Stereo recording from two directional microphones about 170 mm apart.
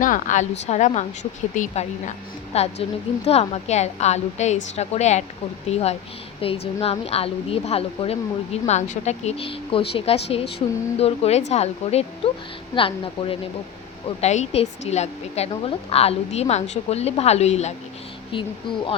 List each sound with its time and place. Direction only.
0.0 s a woman's voice: 50° left (ahead or behind)
18.3 s speech: 30° left (ahead or behind)